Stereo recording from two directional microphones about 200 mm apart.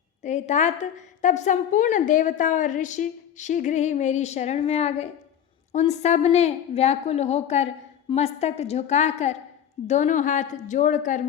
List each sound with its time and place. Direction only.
0.2 s a woman's voice: 35° left (ahead or behind)